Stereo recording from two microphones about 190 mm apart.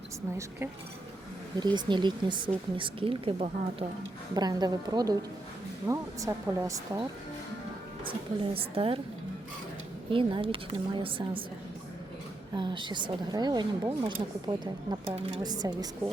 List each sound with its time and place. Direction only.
1.5 s speech: 25° right (ahead or behind)
10.1 s speech: 25° right (ahead or behind)
12.5 s speech: 25° right (ahead or behind)